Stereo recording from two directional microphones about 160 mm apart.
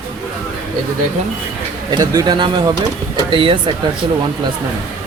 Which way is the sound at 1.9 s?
25° right (ahead or behind).